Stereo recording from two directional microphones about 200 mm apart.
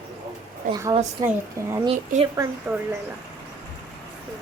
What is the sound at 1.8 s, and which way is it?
Speech, 30° right (ahead or behind).